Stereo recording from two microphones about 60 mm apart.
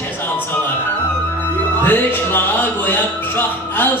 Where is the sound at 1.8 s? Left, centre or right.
Left.